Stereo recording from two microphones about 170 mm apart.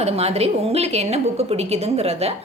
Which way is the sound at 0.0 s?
40° right (ahead or behind).